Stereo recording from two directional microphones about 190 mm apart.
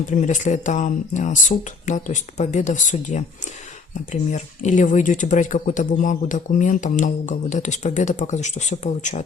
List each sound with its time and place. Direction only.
0.1 s speech: 40° left (ahead or behind)